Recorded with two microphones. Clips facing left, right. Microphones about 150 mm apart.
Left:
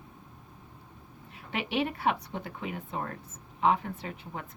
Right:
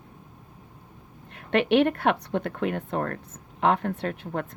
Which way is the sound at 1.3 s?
70° right (ahead or behind).